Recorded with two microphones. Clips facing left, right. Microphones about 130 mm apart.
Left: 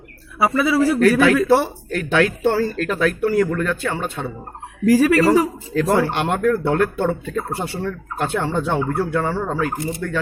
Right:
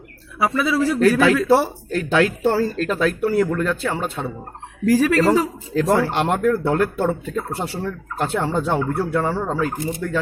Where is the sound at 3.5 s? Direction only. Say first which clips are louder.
Even; 10° right (ahead or behind).